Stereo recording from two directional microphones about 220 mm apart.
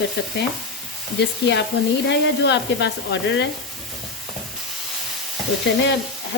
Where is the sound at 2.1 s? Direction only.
50° left (ahead or behind).